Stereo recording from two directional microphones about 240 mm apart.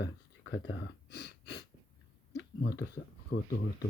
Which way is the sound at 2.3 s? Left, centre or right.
Left.